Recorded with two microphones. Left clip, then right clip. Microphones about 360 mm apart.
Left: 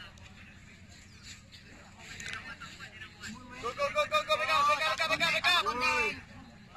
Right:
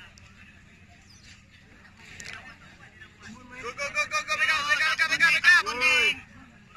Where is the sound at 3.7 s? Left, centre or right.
Centre.